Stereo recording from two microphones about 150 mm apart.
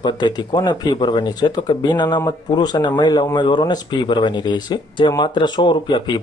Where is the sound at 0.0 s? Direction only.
30° left (ahead or behind).